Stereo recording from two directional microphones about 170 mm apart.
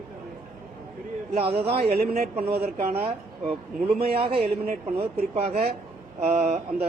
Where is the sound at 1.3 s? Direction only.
35° right (ahead or behind).